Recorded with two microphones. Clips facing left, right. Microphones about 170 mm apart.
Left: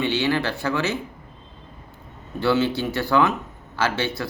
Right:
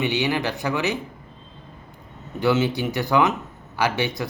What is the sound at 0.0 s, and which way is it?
Speech, 15° right (ahead or behind).